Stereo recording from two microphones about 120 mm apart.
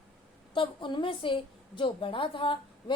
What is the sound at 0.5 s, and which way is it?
A woman's voice, 45° left (ahead or behind).